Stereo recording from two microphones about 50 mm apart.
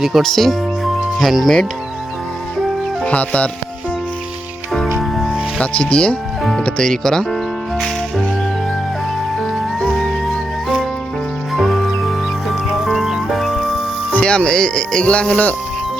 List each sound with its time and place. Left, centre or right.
0.2 s speech: centre
3.0 s speech: left
4.9 s music: centre
5.5 s speech: left
11.5 s music: centre
14.1 s speech: left